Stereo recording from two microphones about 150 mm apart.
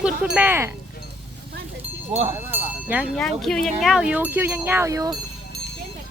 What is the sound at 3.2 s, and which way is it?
Speech, 5° left (ahead or behind).